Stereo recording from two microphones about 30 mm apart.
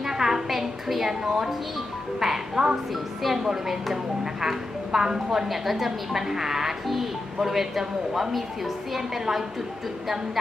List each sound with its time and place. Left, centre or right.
0.0 s a sound: centre
0.5 s a woman's voice: centre
3.9 s a woman's voice: centre
5.5 s a woman's voice: centre